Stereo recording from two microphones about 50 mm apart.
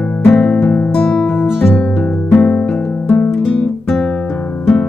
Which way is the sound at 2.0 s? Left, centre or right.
Centre.